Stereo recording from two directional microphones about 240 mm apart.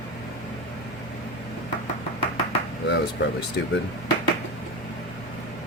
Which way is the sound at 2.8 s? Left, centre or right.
Left.